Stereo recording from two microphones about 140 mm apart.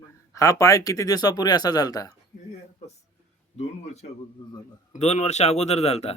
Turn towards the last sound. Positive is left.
turn(degrees=50)  # may be behind; listen again after turning